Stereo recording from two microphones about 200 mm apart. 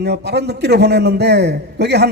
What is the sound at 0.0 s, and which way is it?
A man's voice, 55° right (ahead or behind).